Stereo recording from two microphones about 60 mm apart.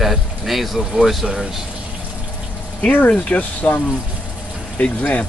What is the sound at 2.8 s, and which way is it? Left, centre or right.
Speech, left.